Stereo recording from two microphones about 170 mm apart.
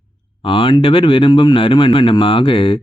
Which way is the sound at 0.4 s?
30° left (ahead or behind).